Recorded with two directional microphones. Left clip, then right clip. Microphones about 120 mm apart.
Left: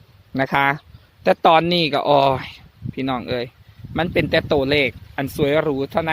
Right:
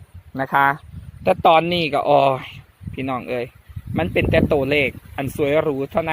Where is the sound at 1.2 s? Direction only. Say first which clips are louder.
Even; 50° left (ahead or behind).